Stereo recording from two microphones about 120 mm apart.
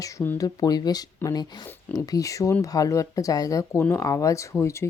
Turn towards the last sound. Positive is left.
turn(degrees=25)  # may be behind; listen again after turning